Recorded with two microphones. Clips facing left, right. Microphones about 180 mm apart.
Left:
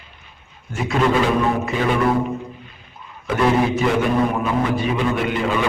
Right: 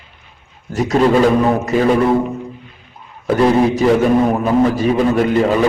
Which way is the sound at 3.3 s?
35° right (ahead or behind).